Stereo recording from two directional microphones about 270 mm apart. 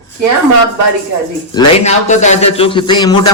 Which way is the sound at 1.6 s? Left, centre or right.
Left.